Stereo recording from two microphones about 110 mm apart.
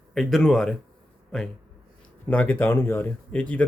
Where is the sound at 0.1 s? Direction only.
5° left (ahead or behind).